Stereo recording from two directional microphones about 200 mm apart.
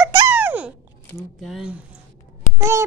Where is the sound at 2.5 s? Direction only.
15° right (ahead or behind).